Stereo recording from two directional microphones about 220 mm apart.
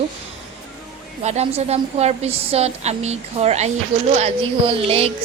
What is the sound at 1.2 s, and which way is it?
Speech, 30° right (ahead or behind).